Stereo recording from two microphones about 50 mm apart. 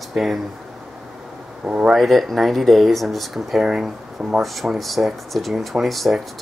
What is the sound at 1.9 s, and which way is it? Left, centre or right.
Speech, centre.